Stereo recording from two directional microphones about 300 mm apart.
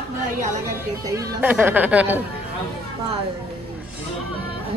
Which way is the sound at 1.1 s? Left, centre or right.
Centre.